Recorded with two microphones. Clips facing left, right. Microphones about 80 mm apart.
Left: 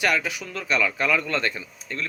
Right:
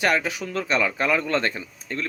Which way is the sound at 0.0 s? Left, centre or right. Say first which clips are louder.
Right 2 dB; right.